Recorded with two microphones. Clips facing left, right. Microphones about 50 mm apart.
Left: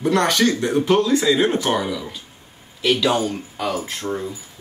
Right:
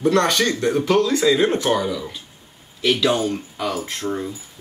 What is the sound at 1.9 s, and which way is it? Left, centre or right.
Speech, centre.